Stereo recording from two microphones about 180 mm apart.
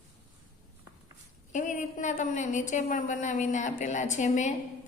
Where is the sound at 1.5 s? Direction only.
45° left (ahead or behind).